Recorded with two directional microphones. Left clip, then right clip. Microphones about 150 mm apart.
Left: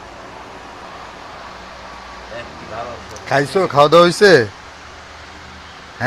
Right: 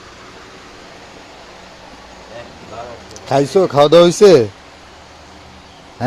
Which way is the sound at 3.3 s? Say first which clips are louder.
Right 3 dB; 85° right.